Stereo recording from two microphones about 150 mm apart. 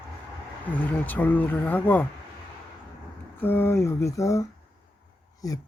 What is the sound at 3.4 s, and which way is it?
Speech, 15° left (ahead or behind).